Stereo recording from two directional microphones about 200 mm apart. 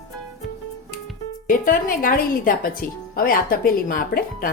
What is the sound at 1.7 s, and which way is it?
Speech, 45° left (ahead or behind).